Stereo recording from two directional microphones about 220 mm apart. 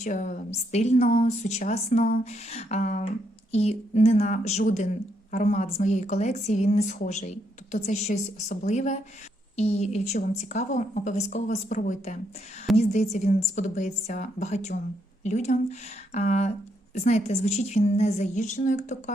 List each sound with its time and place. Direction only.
0.0 s a woman's voice: 35° left (ahead or behind)